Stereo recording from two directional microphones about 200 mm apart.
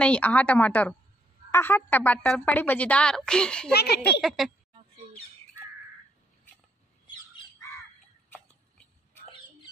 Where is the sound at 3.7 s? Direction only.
55° left (ahead or behind).